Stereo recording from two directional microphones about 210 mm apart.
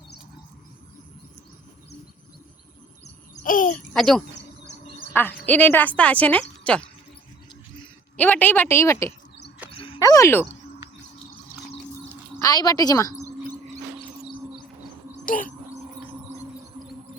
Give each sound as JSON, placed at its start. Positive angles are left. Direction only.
{"t": 3.0, "sound": "a sound", "side_deg": 40}
{"t": 3.9, "sound": "speech", "side_deg": 0}
{"t": 8.1, "sound": "speech", "side_deg": 5}
{"t": 9.7, "sound": "a sound", "side_deg": 25}
{"t": 12.4, "sound": "speech", "side_deg": 20}
{"t": 15.2, "sound": "bird", "side_deg": 40}